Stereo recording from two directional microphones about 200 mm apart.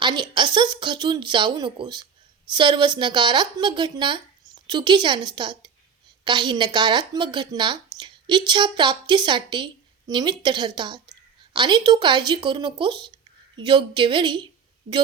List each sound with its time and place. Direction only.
0.0 s a woman's voice: 20° right (ahead or behind)